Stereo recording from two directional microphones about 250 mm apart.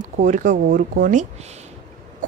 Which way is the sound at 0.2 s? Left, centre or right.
Right.